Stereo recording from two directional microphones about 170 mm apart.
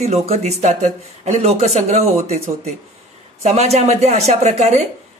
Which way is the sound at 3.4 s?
40° right (ahead or behind).